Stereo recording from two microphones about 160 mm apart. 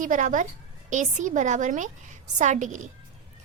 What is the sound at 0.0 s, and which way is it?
A woman's voice, 55° right (ahead or behind).